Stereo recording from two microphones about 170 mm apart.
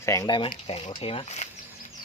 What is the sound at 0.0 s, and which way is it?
Speech, 20° left (ahead or behind).